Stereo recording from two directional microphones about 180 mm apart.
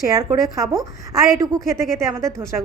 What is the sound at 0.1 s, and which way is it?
A woman's voice, 20° right (ahead or behind).